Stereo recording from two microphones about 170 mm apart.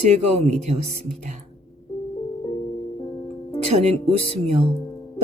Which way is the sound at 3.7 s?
40° right (ahead or behind).